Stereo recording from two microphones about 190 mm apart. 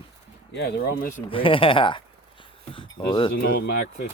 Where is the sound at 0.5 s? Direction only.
65° left (ahead or behind).